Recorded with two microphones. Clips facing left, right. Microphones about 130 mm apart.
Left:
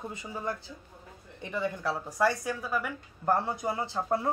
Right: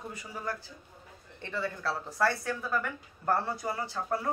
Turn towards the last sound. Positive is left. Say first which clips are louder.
# left 3 dB
turn(degrees=20)  # may be behind; listen again after turning